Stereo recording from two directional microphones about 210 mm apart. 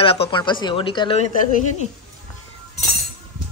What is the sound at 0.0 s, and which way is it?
Speech, 25° left (ahead or behind).